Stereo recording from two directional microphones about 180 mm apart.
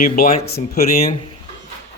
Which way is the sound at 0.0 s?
50° left (ahead or behind).